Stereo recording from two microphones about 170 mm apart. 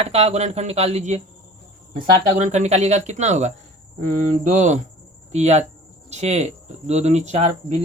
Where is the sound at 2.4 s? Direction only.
45° right (ahead or behind).